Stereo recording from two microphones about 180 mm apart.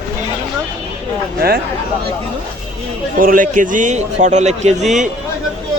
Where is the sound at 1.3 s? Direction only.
60° right (ahead or behind).